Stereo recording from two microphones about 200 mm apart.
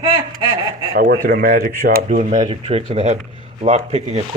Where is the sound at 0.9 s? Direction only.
45° right (ahead or behind).